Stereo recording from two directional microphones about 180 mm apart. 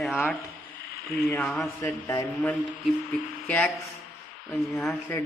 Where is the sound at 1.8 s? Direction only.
15° left (ahead or behind).